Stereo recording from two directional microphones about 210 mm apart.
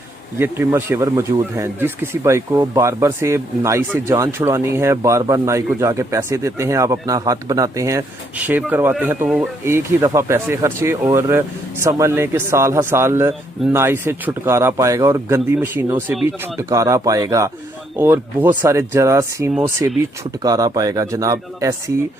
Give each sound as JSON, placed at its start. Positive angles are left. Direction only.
{"t": 0.3, "sound": "speech", "side_deg": -10}